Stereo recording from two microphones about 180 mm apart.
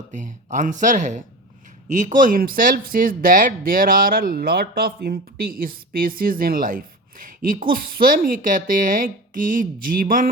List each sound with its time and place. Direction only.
0.1 s speech: 45° right (ahead or behind)